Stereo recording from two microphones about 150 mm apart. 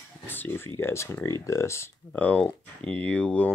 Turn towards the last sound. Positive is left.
turn(degrees=10)  # may be behind; listen again after turning